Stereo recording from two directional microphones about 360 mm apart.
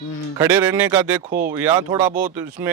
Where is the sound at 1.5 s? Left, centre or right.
Centre.